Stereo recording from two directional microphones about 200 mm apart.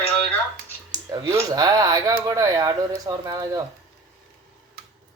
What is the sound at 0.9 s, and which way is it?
Speech, 20° right (ahead or behind).